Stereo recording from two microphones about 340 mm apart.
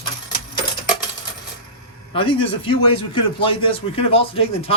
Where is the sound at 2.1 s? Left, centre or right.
Centre.